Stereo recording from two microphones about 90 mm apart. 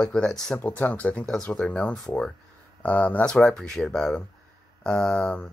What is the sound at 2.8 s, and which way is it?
Speech, 15° left (ahead or behind).